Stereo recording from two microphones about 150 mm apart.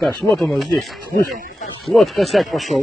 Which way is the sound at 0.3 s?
Centre (ahead or behind).